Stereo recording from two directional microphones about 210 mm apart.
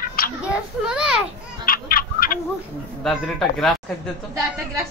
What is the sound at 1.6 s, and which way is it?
Fowl, 45° left (ahead or behind).